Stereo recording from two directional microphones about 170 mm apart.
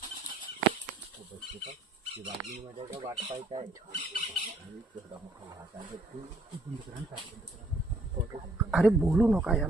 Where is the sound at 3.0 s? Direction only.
30° right (ahead or behind).